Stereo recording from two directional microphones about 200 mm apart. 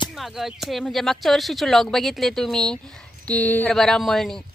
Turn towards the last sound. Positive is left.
turn(degrees=0)  # may be behind; listen again after turning